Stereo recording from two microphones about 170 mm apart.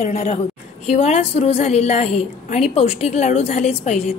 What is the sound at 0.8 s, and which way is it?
A woman's voice, 35° left (ahead or behind).